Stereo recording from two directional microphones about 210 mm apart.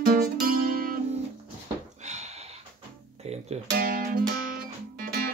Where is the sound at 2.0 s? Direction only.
35° right (ahead or behind).